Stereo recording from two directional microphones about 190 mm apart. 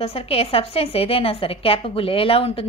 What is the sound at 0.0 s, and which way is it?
A woman's voice, 30° left (ahead or behind).